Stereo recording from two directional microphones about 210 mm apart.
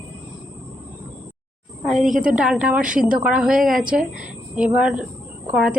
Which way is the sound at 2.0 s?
40° right (ahead or behind).